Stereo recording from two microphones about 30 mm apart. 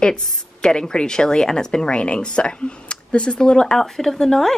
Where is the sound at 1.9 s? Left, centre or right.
Left.